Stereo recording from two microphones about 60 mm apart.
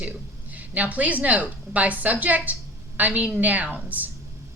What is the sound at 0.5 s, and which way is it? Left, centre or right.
A woman's voice, right.